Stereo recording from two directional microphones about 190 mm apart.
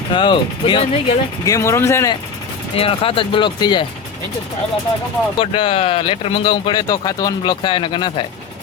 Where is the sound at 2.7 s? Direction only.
30° left (ahead or behind).